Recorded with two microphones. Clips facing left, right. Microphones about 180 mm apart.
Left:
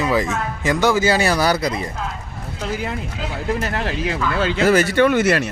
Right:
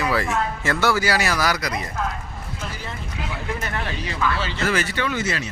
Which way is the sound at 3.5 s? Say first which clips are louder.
Left 5 dB; 35° left (ahead or behind).